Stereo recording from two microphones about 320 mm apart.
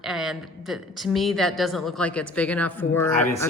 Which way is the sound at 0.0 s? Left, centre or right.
Centre.